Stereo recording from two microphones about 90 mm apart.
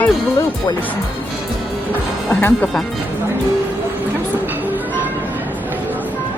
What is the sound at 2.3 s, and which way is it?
Speech, 20° left (ahead or behind).